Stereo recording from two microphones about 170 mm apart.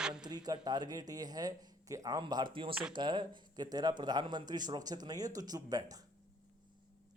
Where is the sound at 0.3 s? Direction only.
25° right (ahead or behind).